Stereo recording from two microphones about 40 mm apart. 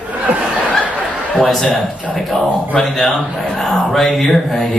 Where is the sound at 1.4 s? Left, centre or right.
Centre.